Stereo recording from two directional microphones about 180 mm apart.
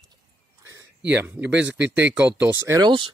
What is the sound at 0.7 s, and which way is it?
Speech, 10° right (ahead or behind).